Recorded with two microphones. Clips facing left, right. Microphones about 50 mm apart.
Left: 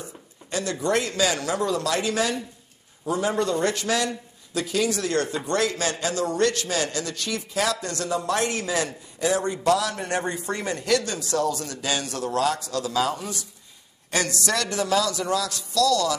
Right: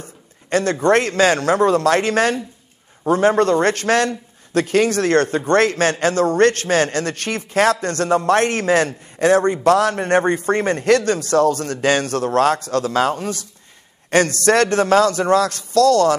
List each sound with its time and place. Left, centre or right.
0.0 s a man's voice: right